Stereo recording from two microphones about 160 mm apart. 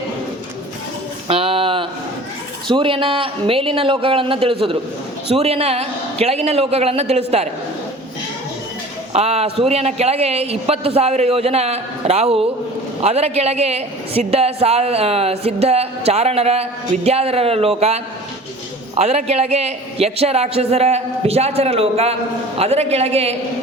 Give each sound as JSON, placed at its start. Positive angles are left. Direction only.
{"t": 1.3, "sound": "a sound", "side_deg": -35}
{"t": 2.6, "sound": "a woman's voice", "side_deg": -30}
{"t": 9.1, "sound": "a woman's voice", "side_deg": -40}